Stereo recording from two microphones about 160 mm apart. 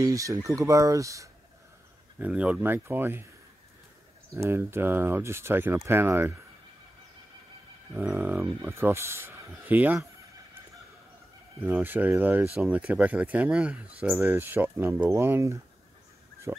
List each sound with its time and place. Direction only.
0.0 s speech: 20° right (ahead or behind)
2.1 s speech: 10° right (ahead or behind)
4.4 s speech: 15° right (ahead or behind)
7.9 s speech: 10° right (ahead or behind)
11.6 s speech: 10° right (ahead or behind)